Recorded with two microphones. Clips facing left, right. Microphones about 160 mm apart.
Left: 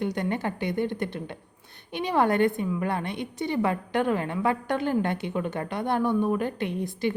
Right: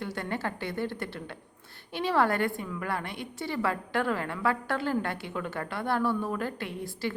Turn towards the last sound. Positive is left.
turn(degrees=20)  # may be behind; listen again after turning